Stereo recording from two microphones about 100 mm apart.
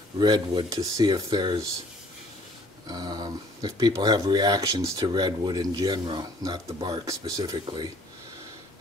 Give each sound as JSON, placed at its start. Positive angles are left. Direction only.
{"t": 0.2, "sound": "speech", "side_deg": -45}
{"t": 2.9, "sound": "speech", "side_deg": -40}